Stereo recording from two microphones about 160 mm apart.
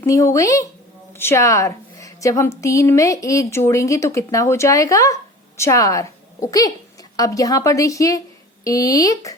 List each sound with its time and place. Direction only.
0.0 s a woman's voice: 20° left (ahead or behind)